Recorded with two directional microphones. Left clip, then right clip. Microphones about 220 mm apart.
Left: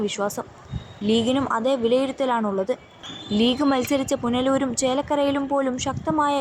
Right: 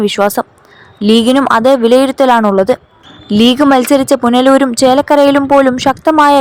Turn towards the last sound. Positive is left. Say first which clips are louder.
# right 15 dB
turn(degrees=-45)  # may be behind; listen again after turning